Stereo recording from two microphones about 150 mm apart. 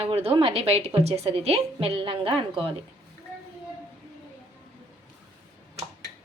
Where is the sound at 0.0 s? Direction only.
40° right (ahead or behind).